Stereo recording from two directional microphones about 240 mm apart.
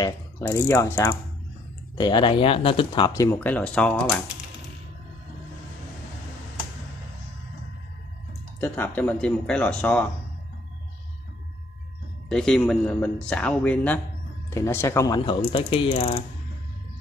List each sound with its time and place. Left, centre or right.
0.0 s speech: centre
8.5 s speech: centre
12.3 s speech: centre; by 16.2 s left